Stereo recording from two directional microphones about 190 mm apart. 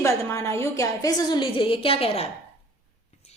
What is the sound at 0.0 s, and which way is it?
A woman's voice, 15° left (ahead or behind).